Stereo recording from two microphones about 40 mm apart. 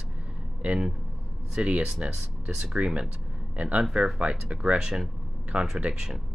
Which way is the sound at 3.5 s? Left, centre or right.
Right.